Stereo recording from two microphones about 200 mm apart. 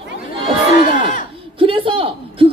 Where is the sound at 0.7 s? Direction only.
40° left (ahead or behind).